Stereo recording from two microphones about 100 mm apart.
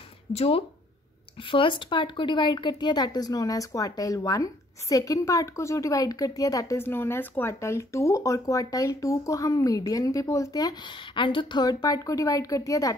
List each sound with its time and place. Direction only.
0.3 s speech: 85° left
1.4 s speech: 60° left (ahead or behind); by 6.8 s 35° left (ahead or behind)
6.8 s speech: 25° left (ahead or behind)